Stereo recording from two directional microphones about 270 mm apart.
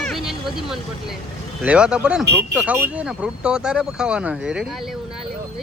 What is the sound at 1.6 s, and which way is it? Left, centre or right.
Speech, centre.